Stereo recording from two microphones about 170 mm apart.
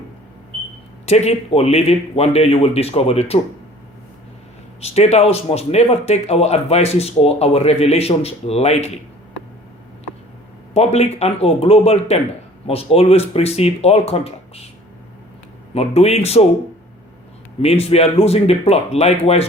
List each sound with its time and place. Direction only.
1.0 s speech: 40° left (ahead or behind)
4.8 s speech: 40° left (ahead or behind)
10.8 s speech: 40° left (ahead or behind)
15.7 s speech: 35° left (ahead or behind)
17.6 s speech: 35° left (ahead or behind)